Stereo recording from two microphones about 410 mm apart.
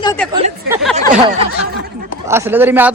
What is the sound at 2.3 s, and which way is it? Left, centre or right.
Speech, centre.